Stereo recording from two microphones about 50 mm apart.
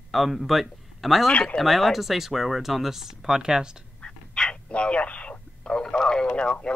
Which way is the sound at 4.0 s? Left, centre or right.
Centre.